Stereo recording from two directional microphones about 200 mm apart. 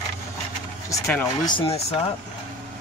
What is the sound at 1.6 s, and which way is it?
Speech, 30° left (ahead or behind).